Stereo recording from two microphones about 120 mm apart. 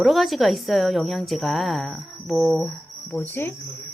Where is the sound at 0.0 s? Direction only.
Centre (ahead or behind).